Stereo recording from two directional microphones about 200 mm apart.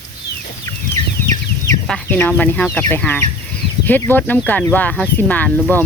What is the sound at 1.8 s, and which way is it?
Speech, 5° left (ahead or behind).